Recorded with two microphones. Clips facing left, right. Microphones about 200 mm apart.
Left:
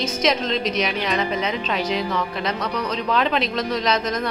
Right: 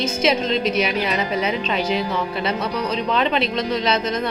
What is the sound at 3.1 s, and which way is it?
Speech, centre (ahead or behind).